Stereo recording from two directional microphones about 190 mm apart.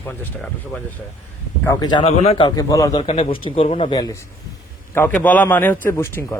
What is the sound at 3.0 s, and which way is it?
Speech, 30° left (ahead or behind).